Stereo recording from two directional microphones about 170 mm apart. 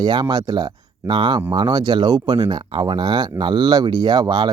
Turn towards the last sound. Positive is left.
turn(degrees=-25)  # may be behind; listen again after turning